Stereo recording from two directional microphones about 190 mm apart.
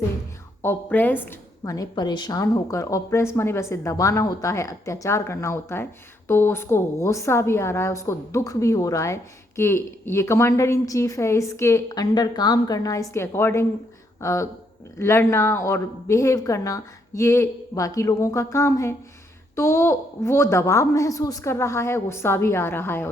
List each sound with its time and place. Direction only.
0.6 s a woman's voice: 10° left (ahead or behind)